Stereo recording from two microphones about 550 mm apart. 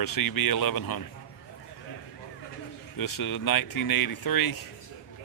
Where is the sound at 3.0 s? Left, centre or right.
Left.